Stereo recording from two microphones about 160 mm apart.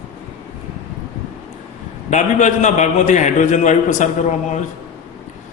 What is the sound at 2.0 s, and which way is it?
A man's voice, 50° left (ahead or behind).